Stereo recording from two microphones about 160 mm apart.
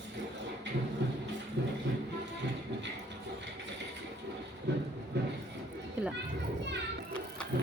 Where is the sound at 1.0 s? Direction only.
90° right.